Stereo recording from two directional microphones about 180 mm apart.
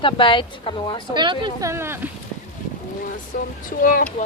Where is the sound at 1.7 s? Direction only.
15° right (ahead or behind).